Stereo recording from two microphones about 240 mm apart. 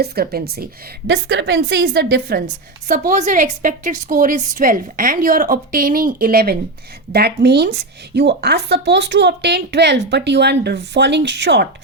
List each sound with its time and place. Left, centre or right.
0.0 s a woman's voice: right
3.1 s a woman's voice: right